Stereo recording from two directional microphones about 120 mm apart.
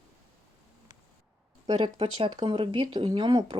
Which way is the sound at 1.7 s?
40° right (ahead or behind).